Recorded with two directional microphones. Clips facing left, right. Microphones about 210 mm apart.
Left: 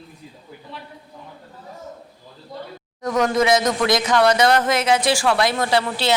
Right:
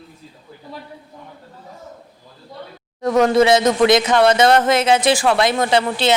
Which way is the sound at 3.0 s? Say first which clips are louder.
Right 5 dB; 30° right (ahead or behind).